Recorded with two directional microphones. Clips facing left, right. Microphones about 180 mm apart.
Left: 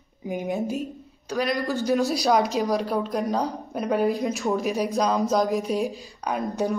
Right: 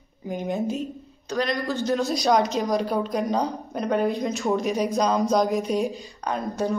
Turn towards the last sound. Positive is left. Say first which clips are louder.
# even
turn(degrees=15)  # may be behind; listen again after turning